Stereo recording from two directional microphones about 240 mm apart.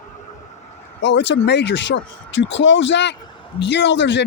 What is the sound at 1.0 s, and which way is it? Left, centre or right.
Speech, left.